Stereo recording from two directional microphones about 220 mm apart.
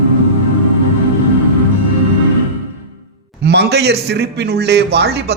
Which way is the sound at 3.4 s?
50° right (ahead or behind).